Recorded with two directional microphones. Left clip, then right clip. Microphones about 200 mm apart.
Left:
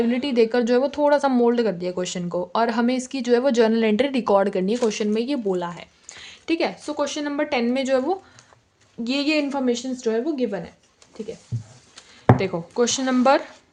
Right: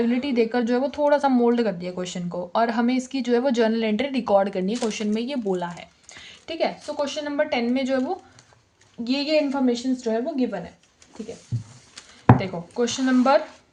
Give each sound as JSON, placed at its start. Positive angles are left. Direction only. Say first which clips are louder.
{"t": 0.1, "sound": "a woman's voice", "louder": "left 3 dB", "side_deg": 20}
{"t": 12.4, "sound": "speech", "louder": "left 3 dB", "side_deg": 40}